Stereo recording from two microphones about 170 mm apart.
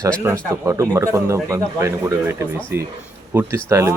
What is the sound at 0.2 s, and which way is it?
A man's voice, 15° right (ahead or behind).